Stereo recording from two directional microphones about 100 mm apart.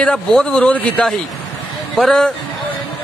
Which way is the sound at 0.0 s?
5° left (ahead or behind).